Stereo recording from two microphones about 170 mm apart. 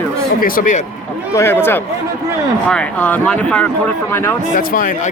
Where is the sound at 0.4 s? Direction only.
55° left (ahead or behind).